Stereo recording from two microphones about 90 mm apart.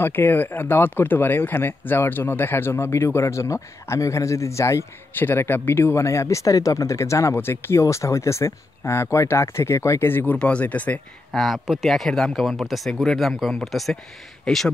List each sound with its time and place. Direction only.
0.0 s speech: 25° left (ahead or behind)
11.3 s speech: centre (ahead or behind)